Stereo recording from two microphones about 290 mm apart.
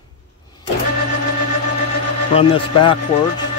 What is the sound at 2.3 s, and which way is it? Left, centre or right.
Speech, centre.